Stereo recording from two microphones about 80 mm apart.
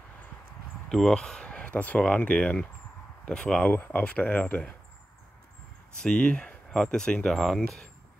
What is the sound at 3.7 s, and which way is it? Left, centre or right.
Speech, left.